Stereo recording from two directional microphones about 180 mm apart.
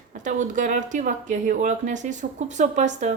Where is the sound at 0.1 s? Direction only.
45° right (ahead or behind).